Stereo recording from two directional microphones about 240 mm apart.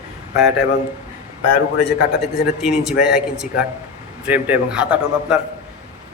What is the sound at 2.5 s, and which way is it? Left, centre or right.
Speech, centre.